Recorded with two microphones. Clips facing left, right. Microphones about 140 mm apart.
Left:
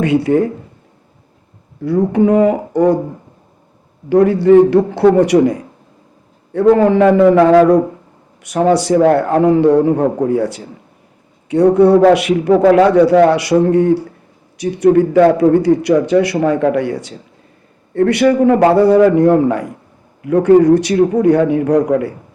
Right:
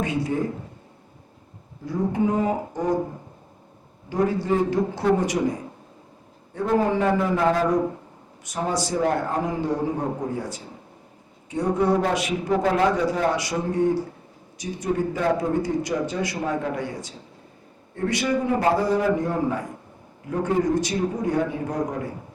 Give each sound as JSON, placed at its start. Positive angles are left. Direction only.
{"t": 0.0, "sound": "a man's voice", "side_deg": 70}
{"t": 1.8, "sound": "a man's voice", "side_deg": 70}
{"t": 4.1, "sound": "a man's voice", "side_deg": 70}